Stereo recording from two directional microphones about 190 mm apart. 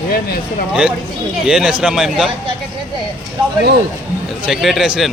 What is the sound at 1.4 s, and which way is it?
Speech, 5° right (ahead or behind).